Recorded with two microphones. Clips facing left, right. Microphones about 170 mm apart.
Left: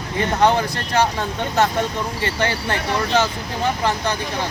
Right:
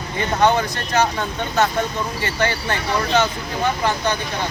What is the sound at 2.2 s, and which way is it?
Speech, 30° left (ahead or behind).